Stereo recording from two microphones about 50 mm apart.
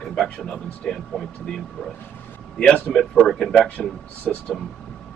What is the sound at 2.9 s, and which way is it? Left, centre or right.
Speech, centre.